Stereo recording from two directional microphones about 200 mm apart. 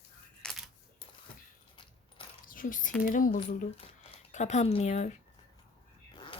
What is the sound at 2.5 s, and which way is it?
Speech, 45° left (ahead or behind).